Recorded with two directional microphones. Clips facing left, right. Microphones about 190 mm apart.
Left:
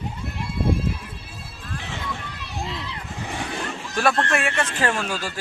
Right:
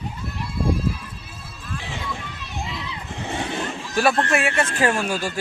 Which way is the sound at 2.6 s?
Centre (ahead or behind).